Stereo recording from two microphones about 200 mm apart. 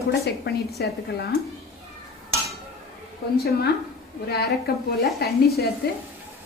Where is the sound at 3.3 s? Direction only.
50° left (ahead or behind).